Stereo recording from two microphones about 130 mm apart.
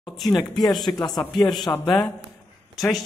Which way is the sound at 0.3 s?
30° left (ahead or behind).